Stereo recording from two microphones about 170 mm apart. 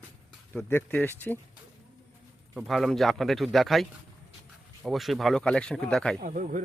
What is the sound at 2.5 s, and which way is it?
A man's voice, centre (ahead or behind).